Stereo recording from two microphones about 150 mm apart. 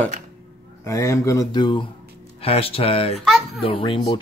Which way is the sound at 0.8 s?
20° left (ahead or behind).